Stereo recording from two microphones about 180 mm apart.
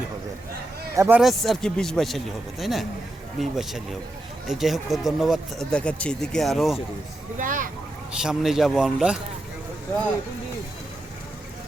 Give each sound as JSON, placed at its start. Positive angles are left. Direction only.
{"t": 0.9, "sound": "speech", "side_deg": -15}
{"t": 1.2, "sound": "speech", "side_deg": 0}
{"t": 7.3, "sound": "speech", "side_deg": -50}
{"t": 8.2, "sound": "speech", "side_deg": 0}